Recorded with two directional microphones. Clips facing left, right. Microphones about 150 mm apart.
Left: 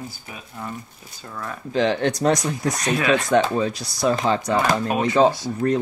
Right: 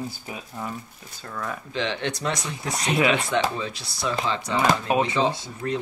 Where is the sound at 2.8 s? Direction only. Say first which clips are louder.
Even; 20° right (ahead or behind).